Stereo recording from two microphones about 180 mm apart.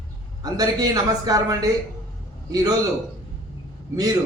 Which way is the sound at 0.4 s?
20° right (ahead or behind).